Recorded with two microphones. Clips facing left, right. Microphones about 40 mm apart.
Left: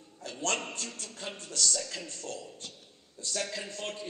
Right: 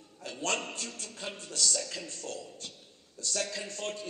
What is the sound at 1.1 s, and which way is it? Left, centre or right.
A man's voice, left.